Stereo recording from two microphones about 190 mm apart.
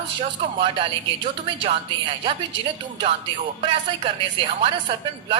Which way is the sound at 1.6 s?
30° right (ahead or behind).